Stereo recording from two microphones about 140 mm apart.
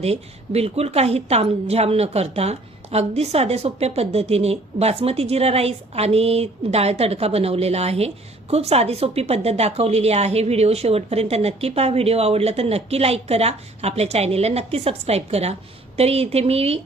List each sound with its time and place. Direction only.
0.0 s speech: 45° right (ahead or behind)